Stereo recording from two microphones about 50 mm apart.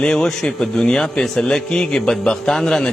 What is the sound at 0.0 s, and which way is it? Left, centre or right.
A man's voice, centre.